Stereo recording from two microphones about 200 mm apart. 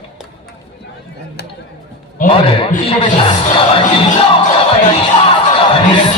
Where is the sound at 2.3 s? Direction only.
30° left (ahead or behind).